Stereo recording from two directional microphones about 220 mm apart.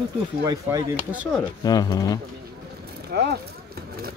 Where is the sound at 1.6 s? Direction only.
15° left (ahead or behind).